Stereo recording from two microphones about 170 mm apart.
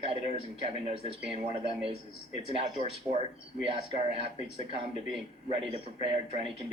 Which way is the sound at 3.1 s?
30° right (ahead or behind).